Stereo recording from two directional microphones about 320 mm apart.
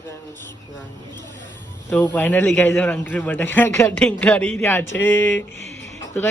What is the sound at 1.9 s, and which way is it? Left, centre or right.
A man's voice, centre.